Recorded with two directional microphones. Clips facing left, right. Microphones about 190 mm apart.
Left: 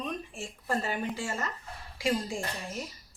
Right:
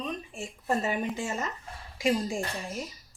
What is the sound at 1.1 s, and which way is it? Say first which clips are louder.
Speech: right 2 dB; 20° right (ahead or behind).